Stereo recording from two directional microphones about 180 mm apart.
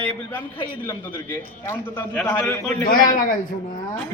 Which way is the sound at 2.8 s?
50° left (ahead or behind).